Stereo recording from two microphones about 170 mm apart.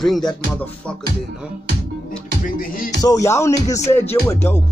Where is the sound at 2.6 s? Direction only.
55° left (ahead or behind).